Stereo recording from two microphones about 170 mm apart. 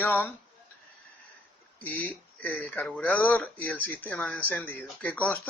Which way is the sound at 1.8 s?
10° left (ahead or behind).